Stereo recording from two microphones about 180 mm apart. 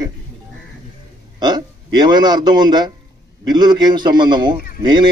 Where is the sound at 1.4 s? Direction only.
25° right (ahead or behind).